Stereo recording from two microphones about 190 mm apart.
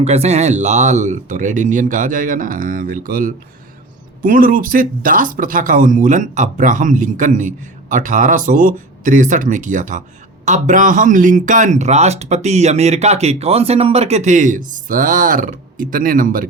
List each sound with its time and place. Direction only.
0.0 s speech: 35° right (ahead or behind)